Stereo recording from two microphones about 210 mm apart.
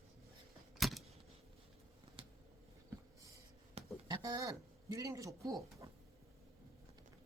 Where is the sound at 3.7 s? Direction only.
20° right (ahead or behind).